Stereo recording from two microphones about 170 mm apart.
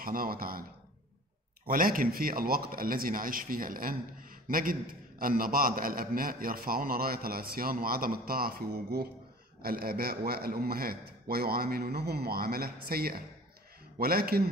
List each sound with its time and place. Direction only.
0.0 s a man's voice: 55° right (ahead or behind)
1.7 s a man's voice: 55° right (ahead or behind)